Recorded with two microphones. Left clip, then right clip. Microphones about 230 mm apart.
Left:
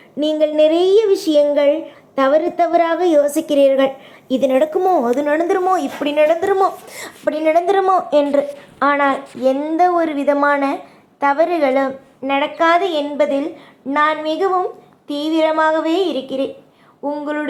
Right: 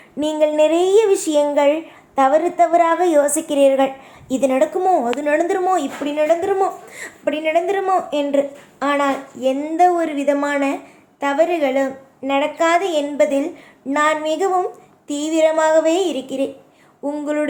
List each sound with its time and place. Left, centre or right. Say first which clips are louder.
0.2 s a woman's voice: left 1 dB; centre
6.1 s a woman's voice: left 3 dB; centre